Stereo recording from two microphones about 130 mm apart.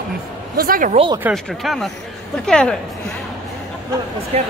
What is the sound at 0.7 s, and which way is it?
Speech, 90° right.